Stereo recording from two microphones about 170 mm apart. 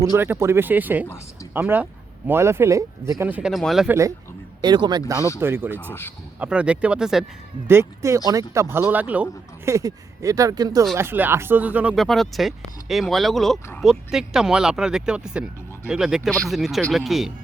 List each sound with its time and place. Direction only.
0.0 s speech: 15° right (ahead or behind)
1.0 s speech: 15° left (ahead or behind)
1.5 s speech: 10° right (ahead or behind)
3.8 s speech: 15° right (ahead or behind)
5.9 s speech: 15° left (ahead or behind)
6.4 s speech: 5° right (ahead or behind)
7.7 s speech: 15° right (ahead or behind); by 17.3 s centre (ahead or behind)